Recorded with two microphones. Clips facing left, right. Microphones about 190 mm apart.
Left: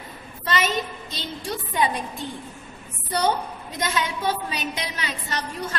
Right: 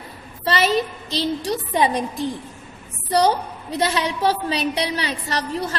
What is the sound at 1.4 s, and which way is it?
Speech, 35° right (ahead or behind).